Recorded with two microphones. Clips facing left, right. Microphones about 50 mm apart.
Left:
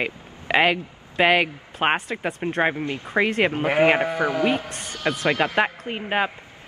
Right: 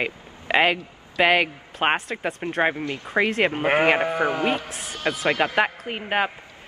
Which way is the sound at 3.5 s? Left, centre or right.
Right.